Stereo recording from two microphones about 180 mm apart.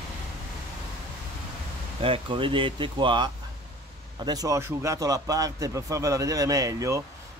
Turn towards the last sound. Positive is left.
turn(degrees=-20)  # may be behind; listen again after turning